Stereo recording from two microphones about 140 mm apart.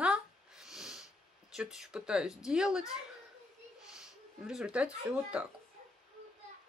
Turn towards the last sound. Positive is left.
turn(degrees=-10)  # may be behind; listen again after turning